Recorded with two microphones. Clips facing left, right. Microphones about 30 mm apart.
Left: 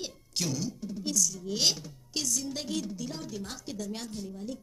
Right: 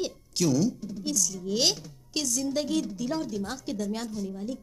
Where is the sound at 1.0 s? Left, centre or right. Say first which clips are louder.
Right 2 dB; centre.